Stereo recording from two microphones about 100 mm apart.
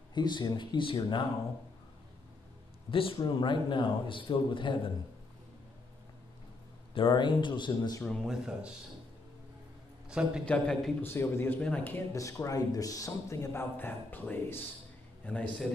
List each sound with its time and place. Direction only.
0.1 s speech: 45° left (ahead or behind)
2.9 s a man's voice: 65° left (ahead or behind)
6.9 s speech: 55° left (ahead or behind)
8.3 s speech: 10° right (ahead or behind)
10.0 s a man's voice: 10° right (ahead or behind)
10.4 s a man's voice: 10° left (ahead or behind)
11.0 s a man's voice: 25° left (ahead or behind)
12.1 s a man's voice: 30° left (ahead or behind); by 15.5 s 10° left (ahead or behind)